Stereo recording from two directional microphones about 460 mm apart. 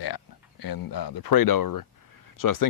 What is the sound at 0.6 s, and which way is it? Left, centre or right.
Speech, left.